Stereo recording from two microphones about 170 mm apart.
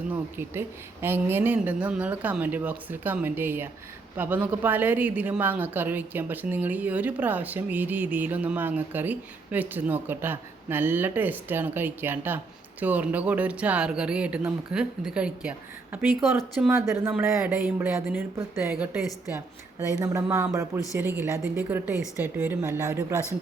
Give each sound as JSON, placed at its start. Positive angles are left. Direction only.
{"t": 0.1, "sound": "a woman's voice", "side_deg": -15}
{"t": 16.7, "sound": "a woman's voice", "side_deg": -15}
{"t": 20.3, "sound": "a woman's voice", "side_deg": -15}